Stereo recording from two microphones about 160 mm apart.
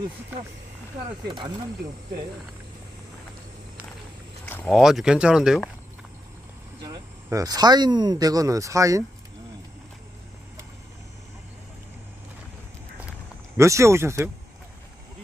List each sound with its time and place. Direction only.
4.6 s speech: centre (ahead or behind)
7.2 s speech: 20° right (ahead or behind)
13.6 s speech: 20° right (ahead or behind)